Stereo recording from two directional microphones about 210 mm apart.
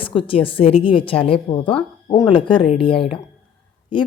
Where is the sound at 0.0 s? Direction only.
25° left (ahead or behind).